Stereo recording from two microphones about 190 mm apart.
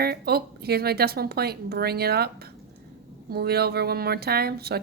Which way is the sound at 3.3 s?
55° right (ahead or behind).